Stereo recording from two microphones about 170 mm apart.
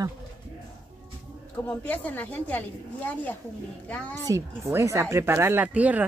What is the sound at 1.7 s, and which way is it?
Speech, 10° left (ahead or behind).